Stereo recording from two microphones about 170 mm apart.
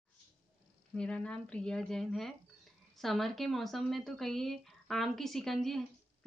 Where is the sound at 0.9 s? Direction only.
5° left (ahead or behind).